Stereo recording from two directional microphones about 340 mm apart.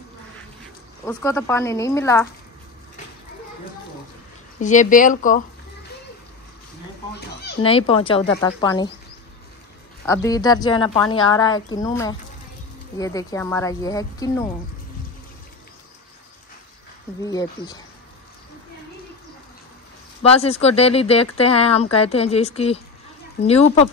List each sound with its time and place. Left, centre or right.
1.0 s speech: centre
4.6 s speech: left
7.6 s speech: centre
10.0 s speech: centre
17.2 s speech: centre
20.2 s speech: centre